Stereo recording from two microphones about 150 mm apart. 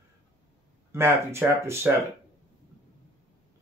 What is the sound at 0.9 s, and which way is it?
Speech, 15° right (ahead or behind).